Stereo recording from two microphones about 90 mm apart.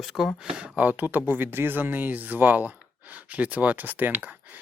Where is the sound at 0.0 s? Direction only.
Centre (ahead or behind).